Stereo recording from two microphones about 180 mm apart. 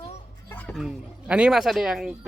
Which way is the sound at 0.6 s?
10° left (ahead or behind).